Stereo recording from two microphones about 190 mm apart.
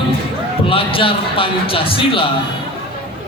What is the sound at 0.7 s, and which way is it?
A man's voice, 30° left (ahead or behind).